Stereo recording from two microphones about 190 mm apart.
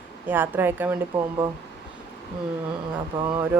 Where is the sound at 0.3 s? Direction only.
10° right (ahead or behind).